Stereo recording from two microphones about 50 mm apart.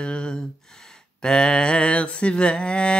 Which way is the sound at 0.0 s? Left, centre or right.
Centre.